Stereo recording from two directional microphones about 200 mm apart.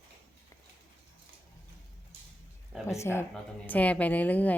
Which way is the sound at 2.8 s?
15° left (ahead or behind).